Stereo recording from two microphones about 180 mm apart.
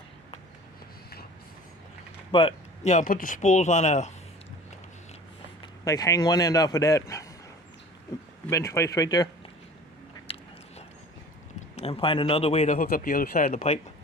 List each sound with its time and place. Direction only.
2.3 s speech: 35° left (ahead or behind)
5.8 s a man's voice: 20° left (ahead or behind)
8.4 s speech: 15° left (ahead or behind)
10.3 s biting: 30° left (ahead or behind)
11.8 s speech: 30° left (ahead or behind)